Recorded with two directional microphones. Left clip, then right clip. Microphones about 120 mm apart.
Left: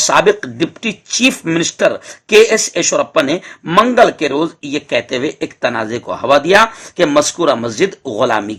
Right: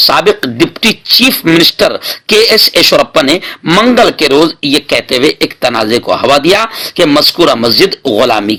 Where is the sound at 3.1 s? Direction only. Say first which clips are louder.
Right 6 dB; 50° right (ahead or behind).